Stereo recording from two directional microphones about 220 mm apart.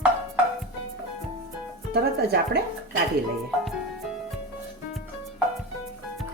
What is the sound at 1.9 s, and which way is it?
Speech, 45° right (ahead or behind).